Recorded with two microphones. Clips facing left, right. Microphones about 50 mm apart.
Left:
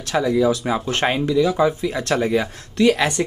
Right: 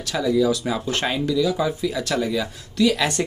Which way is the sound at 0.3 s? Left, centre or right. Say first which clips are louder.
Even; left.